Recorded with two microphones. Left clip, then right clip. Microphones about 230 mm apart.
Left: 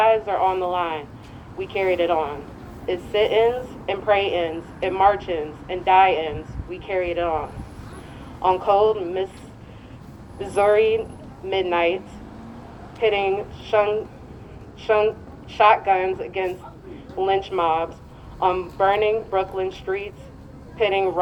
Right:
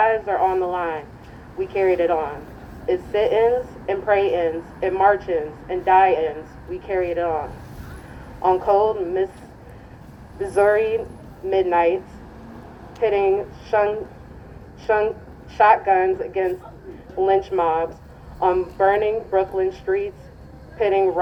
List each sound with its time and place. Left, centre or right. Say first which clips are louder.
0.0 s a woman's voice: even; centre
8.4 s a woman's voice: right 1 dB; centre
10.4 s a woman's voice: even; centre
13.0 s a woman's voice: right 2 dB; centre
15.5 s a woman's voice: right 1 dB; centre